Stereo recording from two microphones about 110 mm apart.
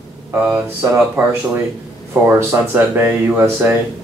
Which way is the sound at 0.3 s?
15° right (ahead or behind).